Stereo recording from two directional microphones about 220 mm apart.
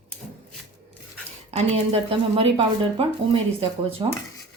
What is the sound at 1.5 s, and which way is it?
Speech, 25° right (ahead or behind).